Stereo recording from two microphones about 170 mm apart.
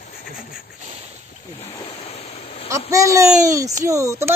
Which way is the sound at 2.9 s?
20° right (ahead or behind).